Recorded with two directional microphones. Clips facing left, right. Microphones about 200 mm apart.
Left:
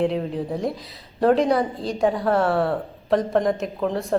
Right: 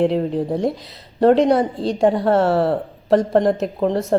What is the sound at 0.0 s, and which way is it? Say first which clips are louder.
Speech: right 5 dB; 30° right (ahead or behind).